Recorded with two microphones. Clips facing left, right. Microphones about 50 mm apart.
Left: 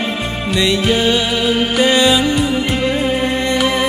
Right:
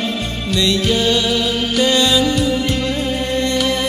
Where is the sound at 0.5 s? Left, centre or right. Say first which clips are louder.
Left 2 dB; centre.